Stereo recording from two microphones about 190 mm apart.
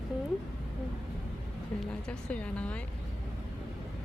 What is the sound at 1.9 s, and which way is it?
Speech, 5° left (ahead or behind).